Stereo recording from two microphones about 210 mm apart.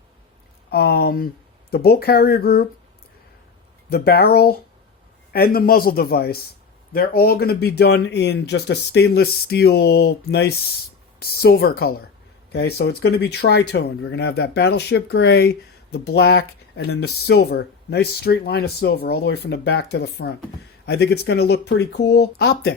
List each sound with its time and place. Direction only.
0.7 s speech: 50° left (ahead or behind)
3.8 s speech: 50° left (ahead or behind)